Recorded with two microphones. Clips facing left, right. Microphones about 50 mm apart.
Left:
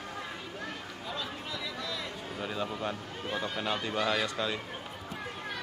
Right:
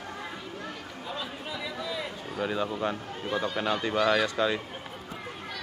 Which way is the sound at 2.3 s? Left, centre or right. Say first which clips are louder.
Right 6 dB; centre.